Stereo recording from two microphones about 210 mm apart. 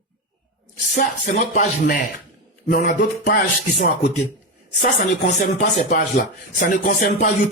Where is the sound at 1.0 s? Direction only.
40° left (ahead or behind).